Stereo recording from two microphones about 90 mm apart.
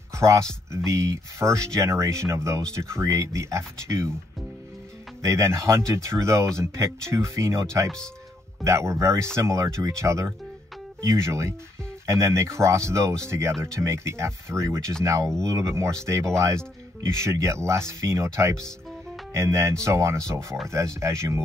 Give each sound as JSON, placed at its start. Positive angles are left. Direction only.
{"t": 0.1, "sound": "speech", "side_deg": -35}
{"t": 5.2, "sound": "speech", "side_deg": -35}
{"t": 8.6, "sound": "speech", "side_deg": -35}